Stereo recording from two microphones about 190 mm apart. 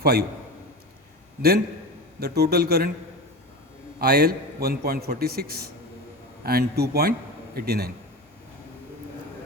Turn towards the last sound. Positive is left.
turn(degrees=-55)  # may be behind; listen again after turning